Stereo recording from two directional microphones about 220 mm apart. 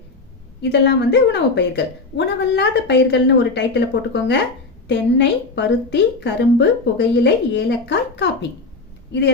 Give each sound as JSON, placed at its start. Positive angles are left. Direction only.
{"t": 0.6, "sound": "a woman's voice", "side_deg": 50}